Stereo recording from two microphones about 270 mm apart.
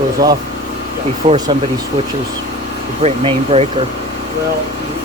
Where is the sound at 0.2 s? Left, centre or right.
Centre.